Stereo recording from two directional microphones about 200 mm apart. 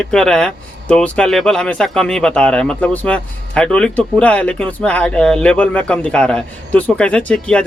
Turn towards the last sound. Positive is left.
turn(degrees=5)  # may be behind; listen again after turning